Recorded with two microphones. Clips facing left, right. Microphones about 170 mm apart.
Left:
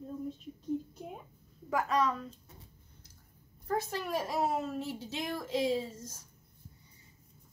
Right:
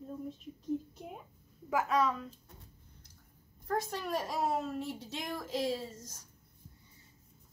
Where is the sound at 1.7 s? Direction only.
Centre (ahead or behind).